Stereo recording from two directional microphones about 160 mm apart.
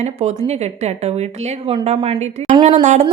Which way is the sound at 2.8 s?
45° right (ahead or behind).